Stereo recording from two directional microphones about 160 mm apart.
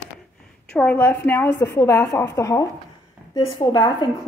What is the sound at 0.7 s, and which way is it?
A woman's voice, 10° left (ahead or behind).